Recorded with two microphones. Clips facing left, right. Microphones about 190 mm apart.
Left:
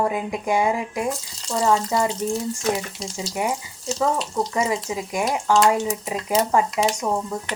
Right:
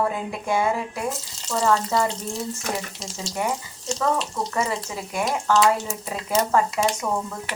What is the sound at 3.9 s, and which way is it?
Speech, 5° left (ahead or behind).